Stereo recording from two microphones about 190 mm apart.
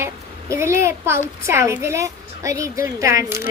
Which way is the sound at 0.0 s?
15° right (ahead or behind).